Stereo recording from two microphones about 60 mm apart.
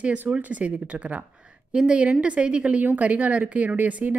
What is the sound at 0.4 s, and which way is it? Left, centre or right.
A woman's voice, right.